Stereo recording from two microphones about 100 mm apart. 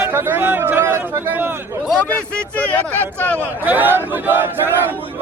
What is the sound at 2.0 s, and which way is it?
Speech, 15° left (ahead or behind).